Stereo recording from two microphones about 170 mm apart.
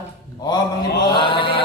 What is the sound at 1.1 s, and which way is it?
Speech, 30° left (ahead or behind).